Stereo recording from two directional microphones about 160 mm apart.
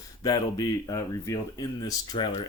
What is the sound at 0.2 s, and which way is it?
Speech, 25° left (ahead or behind).